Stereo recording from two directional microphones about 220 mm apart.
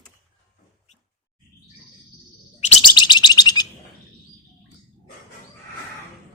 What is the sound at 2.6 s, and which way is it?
Bird, 25° left (ahead or behind).